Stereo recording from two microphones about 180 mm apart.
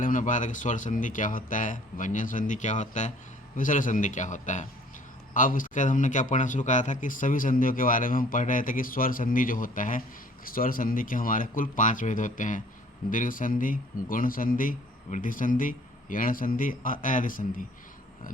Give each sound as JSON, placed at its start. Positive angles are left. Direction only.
{"t": 0.0, "sound": "a man's voice", "side_deg": 45}